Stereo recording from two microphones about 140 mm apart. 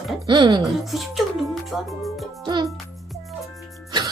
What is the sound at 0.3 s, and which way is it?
Speech, 35° right (ahead or behind).